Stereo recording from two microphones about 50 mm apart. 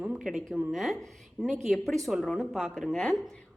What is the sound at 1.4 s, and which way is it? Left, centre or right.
Speech, centre.